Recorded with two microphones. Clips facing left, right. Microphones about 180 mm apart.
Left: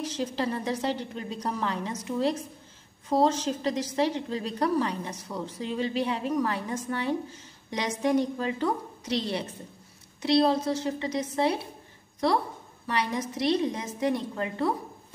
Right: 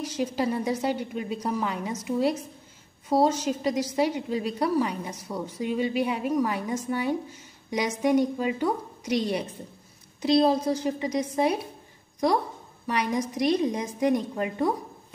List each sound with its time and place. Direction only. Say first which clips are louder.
0.0 s a woman's voice: right 2 dB; 10° right (ahead or behind)
12.8 s a woman's voice: right 2 dB; 15° right (ahead or behind)